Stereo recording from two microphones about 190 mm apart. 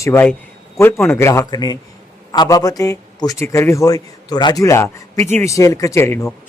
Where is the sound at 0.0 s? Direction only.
15° left (ahead or behind).